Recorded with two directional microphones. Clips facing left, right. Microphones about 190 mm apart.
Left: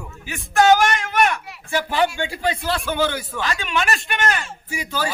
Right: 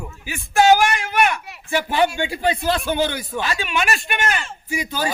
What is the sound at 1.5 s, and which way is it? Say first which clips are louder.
Speech: right 1 dB; 15° right (ahead or behind).